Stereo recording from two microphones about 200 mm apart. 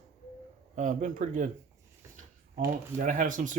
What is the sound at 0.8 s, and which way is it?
Speech, 40° right (ahead or behind).